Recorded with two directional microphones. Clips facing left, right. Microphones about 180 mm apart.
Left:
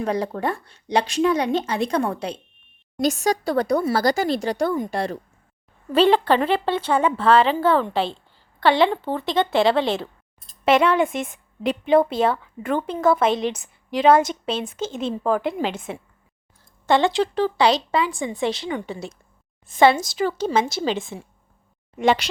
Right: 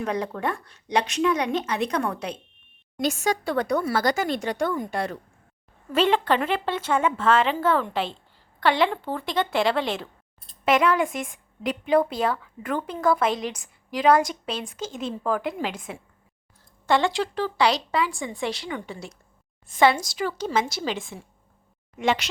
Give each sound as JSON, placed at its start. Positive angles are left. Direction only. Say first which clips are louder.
{"t": 0.0, "sound": "speech", "louder": "left 3 dB", "side_deg": 35}